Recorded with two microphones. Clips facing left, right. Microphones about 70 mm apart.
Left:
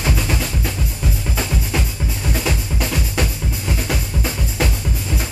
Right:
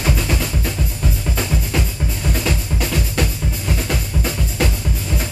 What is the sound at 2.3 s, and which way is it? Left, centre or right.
Drum, centre.